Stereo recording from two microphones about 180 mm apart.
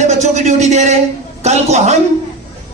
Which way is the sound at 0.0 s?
40° right (ahead or behind).